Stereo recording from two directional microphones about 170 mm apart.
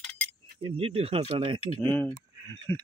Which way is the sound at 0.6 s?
35° right (ahead or behind).